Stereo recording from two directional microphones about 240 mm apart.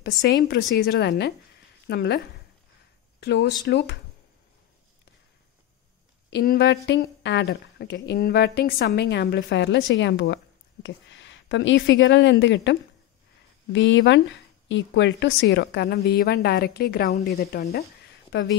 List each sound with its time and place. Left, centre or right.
0.0 s a woman's voice: left
6.3 s a woman's voice: left
13.7 s a woman's voice: left